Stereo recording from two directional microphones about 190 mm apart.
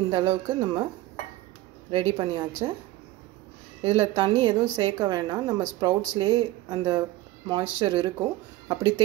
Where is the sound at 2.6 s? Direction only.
20° right (ahead or behind).